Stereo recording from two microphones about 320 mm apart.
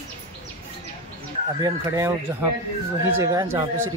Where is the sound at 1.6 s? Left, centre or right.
Centre.